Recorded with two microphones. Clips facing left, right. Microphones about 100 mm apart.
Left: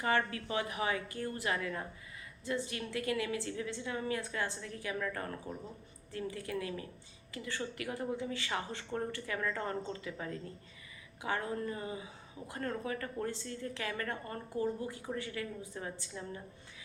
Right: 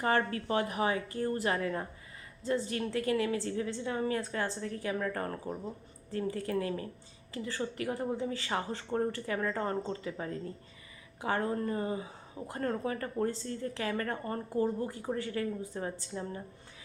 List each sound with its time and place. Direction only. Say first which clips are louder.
0.0 s speech: right 3 dB; 40° right (ahead or behind)